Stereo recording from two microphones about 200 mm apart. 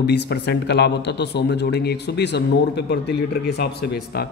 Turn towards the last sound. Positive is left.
turn(degrees=55)  # may be behind; listen again after turning